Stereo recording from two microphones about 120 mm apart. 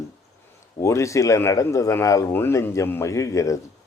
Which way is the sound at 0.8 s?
25° left (ahead or behind).